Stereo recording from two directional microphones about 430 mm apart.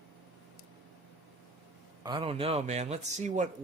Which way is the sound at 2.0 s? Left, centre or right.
Centre.